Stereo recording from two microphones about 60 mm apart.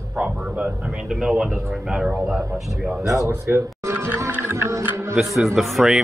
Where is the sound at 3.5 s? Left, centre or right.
Right.